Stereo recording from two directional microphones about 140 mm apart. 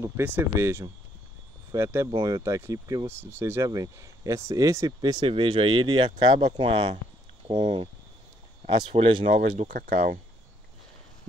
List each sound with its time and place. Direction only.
0.0 s speech: 15° right (ahead or behind); by 7.9 s 40° right (ahead or behind)
8.9 s speech: 45° right (ahead or behind)
9.3 s speech: 65° right (ahead or behind)